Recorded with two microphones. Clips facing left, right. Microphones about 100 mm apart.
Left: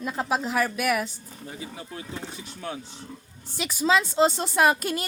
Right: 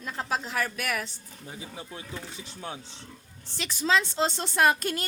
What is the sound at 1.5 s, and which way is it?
Speech, 15° right (ahead or behind).